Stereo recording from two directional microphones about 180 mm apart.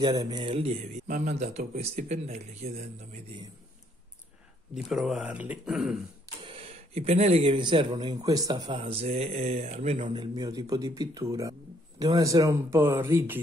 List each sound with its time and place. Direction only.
0.0 s speech: 20° right (ahead or behind); by 3.2 s 40° right (ahead or behind)
4.7 s speech: centre (ahead or behind)
6.4 s speech: 35° right (ahead or behind); by 13.4 s 15° right (ahead or behind)